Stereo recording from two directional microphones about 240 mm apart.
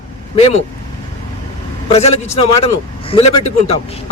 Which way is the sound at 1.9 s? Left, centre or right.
Left.